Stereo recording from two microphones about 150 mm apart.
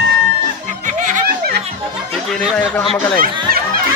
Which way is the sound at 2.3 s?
5° left (ahead or behind).